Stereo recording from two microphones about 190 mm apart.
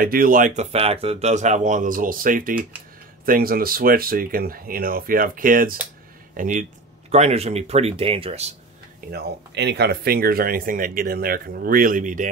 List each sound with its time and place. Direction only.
0.0 s speech: 50° right (ahead or behind); by 8.5 s 35° right (ahead or behind)
9.1 s speech: 60° right (ahead or behind); by 12.3 s 40° right (ahead or behind)